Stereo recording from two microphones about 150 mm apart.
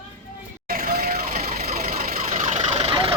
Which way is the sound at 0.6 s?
80° right.